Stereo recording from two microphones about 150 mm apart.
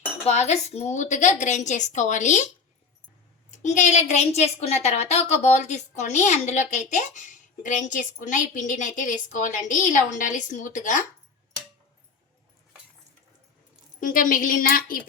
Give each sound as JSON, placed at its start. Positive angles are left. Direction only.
{"t": 0.3, "sound": "a woman's voice", "side_deg": 50}
{"t": 3.5, "sound": "a woman's voice", "side_deg": 55}
{"t": 14.0, "sound": "a woman's voice", "side_deg": 65}